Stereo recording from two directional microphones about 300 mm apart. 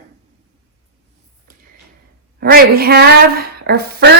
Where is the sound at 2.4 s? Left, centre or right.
Right.